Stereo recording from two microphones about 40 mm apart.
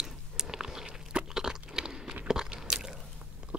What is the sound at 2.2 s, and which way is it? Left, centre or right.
Biting, centre.